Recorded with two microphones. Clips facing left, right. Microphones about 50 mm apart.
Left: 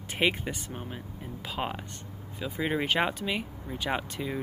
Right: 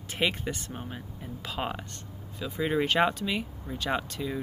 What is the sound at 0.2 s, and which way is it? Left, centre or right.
Speech, centre.